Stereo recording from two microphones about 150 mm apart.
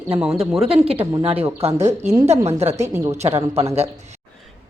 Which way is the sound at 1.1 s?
40° right (ahead or behind).